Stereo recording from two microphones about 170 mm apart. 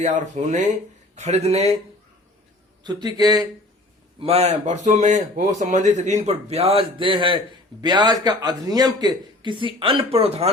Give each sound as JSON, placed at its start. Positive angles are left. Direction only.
{"t": 0.0, "sound": "speech", "side_deg": -45}
{"t": 2.8, "sound": "speech", "side_deg": -25}
{"t": 4.2, "sound": "speech", "side_deg": -40}